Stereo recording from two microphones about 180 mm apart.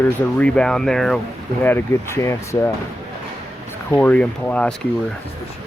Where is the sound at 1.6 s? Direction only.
15° left (ahead or behind).